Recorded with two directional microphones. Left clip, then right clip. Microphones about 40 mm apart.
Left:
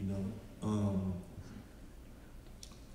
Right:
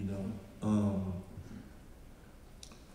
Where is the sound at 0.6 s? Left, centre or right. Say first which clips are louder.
Right 4 dB; centre.